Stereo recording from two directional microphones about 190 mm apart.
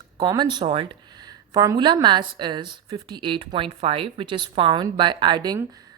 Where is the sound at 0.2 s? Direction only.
25° right (ahead or behind).